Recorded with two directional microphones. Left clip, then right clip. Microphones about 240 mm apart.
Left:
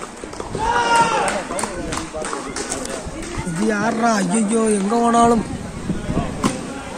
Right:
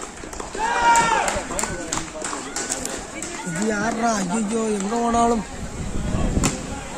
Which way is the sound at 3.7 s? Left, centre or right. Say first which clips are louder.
Left 4 dB; centre.